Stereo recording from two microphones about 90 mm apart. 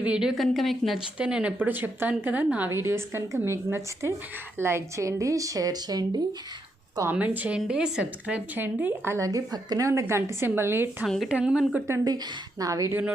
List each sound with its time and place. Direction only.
0.0 s a woman's voice: 10° right (ahead or behind)
1.2 s a woman's voice: 10° right (ahead or behind)
2.6 s a woman's voice: 30° right (ahead or behind); by 6.1 s 45° right (ahead or behind)
7.1 s speech: 15° right (ahead or behind)
8.5 s a woman's voice: 20° right (ahead or behind)
9.2 s a woman's voice: 45° right (ahead or behind); by 10.8 s 25° right (ahead or behind)
11.0 s a woman's voice: centre (ahead or behind)
11.3 s speech: 10° right (ahead or behind)
12.0 s a woman's voice: 45° right (ahead or behind)